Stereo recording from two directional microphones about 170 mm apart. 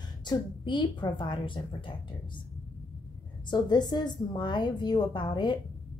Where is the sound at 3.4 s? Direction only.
25° left (ahead or behind).